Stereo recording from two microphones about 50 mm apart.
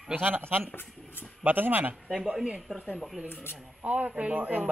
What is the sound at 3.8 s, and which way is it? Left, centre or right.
Speech, right.